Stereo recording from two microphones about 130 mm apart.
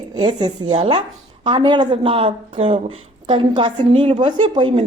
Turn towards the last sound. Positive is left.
turn(degrees=-40)  # may be behind; listen again after turning